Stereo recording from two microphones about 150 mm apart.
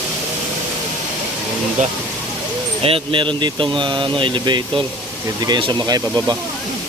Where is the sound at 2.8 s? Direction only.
40° right (ahead or behind).